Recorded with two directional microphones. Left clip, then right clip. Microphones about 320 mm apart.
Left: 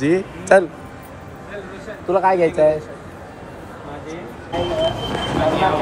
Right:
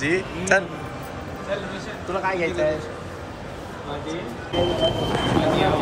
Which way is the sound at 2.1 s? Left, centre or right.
Centre.